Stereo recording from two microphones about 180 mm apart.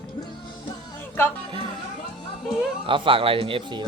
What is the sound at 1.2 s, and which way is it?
Speech, 10° left (ahead or behind).